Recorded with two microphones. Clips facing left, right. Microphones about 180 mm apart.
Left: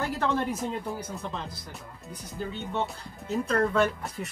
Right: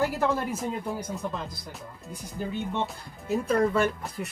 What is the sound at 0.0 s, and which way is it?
Speech, 10° right (ahead or behind).